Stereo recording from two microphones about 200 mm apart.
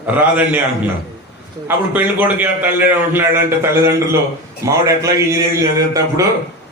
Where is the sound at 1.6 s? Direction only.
10° right (ahead or behind).